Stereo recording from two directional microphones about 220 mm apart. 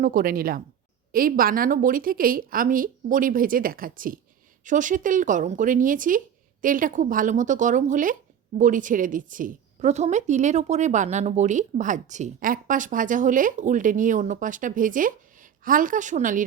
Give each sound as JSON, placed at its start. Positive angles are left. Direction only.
{"t": 0.0, "sound": "speech", "side_deg": -40}